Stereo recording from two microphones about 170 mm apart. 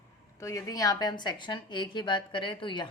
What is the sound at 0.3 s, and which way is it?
A woman's voice, 20° left (ahead or behind).